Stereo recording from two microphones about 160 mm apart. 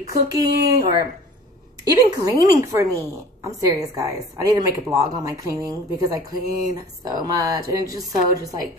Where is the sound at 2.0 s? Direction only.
20° right (ahead or behind).